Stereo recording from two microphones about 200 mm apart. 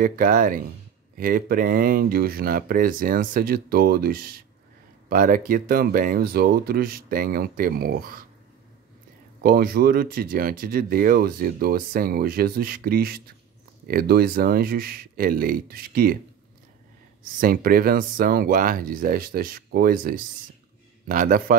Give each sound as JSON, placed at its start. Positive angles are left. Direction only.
{"t": 0.0, "sound": "speech", "side_deg": -45}
{"t": 9.4, "sound": "speech", "side_deg": -50}
{"t": 17.2, "sound": "speech", "side_deg": -45}